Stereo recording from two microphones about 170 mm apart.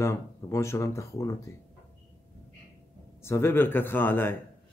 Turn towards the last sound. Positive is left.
turn(degrees=10)  # may be behind; listen again after turning